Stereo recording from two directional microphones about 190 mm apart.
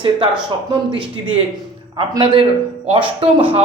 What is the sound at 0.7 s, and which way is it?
A man's voice, 25° right (ahead or behind).